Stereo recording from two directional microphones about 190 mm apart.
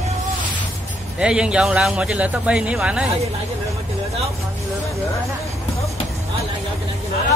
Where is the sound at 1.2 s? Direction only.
5° right (ahead or behind).